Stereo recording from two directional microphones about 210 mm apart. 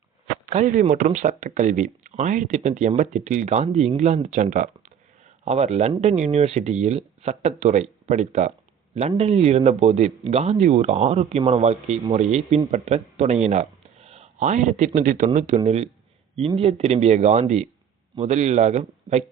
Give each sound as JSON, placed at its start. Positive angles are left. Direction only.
{"t": 0.5, "sound": "speech", "side_deg": -35}